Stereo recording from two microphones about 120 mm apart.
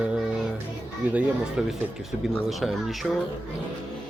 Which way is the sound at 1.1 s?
5° right (ahead or behind).